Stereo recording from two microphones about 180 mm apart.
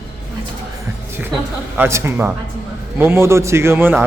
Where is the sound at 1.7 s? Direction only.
10° right (ahead or behind).